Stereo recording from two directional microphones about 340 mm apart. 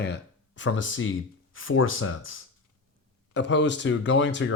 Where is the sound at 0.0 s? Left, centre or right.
Left.